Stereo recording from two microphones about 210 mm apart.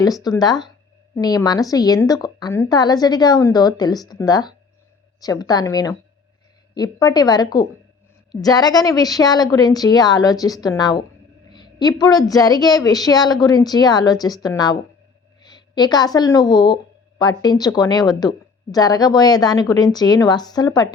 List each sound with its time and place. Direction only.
0.0 s a woman's voice: 20° left (ahead or behind)